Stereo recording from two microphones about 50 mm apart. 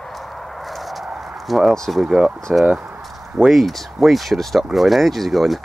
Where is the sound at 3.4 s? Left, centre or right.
Centre.